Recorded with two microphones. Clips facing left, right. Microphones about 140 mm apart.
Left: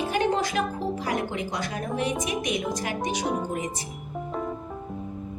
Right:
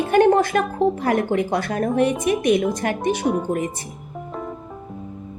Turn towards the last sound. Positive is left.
turn(degrees=0)  # may be behind; listen again after turning